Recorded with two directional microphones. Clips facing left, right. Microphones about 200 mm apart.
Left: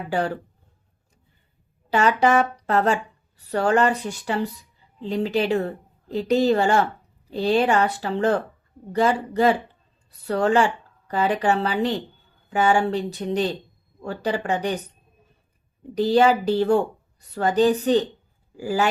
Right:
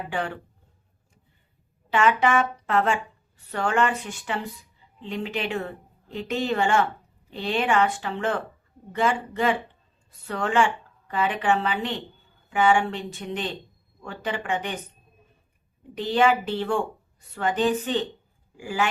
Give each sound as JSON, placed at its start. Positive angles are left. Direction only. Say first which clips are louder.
{"t": 0.1, "sound": "a woman's voice", "louder": "left 7 dB", "side_deg": 35}
{"t": 1.9, "sound": "a woman's voice", "louder": "left 2 dB", "side_deg": 35}
{"t": 16.0, "sound": "a woman's voice", "louder": "left 4 dB", "side_deg": 40}